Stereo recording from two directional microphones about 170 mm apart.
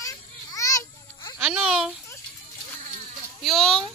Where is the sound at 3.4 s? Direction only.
Centre (ahead or behind).